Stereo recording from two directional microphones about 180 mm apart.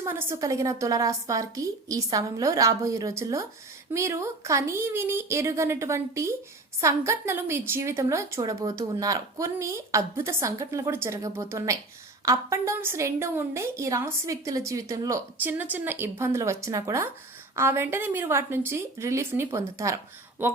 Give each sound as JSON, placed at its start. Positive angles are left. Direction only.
{"t": 0.0, "sound": "a woman's voice", "side_deg": -15}